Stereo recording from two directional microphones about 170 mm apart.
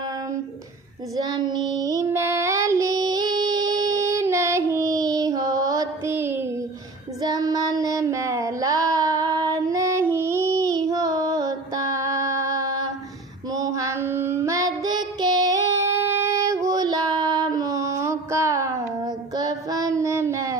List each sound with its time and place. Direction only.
1.1 s female singing: 25° right (ahead or behind)
7.2 s child singing: 20° right (ahead or behind)
13.5 s female singing: 20° right (ahead or behind)